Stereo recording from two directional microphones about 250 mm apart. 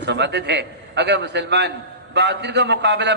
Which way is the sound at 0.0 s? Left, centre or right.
Right.